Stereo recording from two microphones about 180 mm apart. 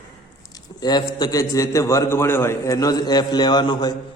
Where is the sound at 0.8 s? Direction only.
20° left (ahead or behind).